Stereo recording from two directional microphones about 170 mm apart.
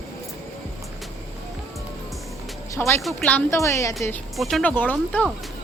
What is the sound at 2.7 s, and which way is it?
Speech, 15° left (ahead or behind).